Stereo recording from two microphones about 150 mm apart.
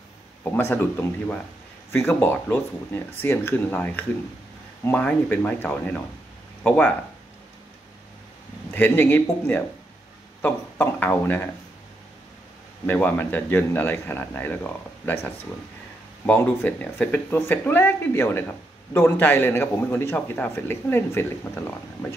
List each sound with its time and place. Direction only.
0.4 s a man's voice: 15° left (ahead or behind)
8.7 s a man's voice: 15° left (ahead or behind)
12.8 s a man's voice: 10° left (ahead or behind)